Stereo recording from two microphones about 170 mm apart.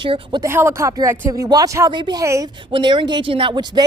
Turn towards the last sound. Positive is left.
turn(degrees=-25)  # may be behind; listen again after turning